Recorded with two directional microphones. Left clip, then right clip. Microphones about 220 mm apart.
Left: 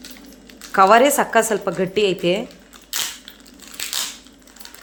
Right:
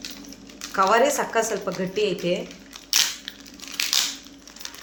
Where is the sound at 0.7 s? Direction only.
45° left (ahead or behind).